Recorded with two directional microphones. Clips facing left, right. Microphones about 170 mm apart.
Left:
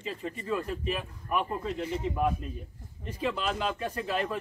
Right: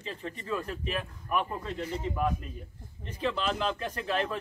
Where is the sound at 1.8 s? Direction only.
20° left (ahead or behind).